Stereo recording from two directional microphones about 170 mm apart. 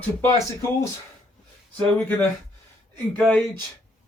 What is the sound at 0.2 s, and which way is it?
Speech, 15° left (ahead or behind).